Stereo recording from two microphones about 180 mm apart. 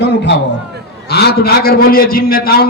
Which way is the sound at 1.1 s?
60° left (ahead or behind).